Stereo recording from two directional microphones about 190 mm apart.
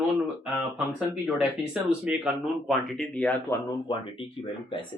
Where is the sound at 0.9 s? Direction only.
5° right (ahead or behind).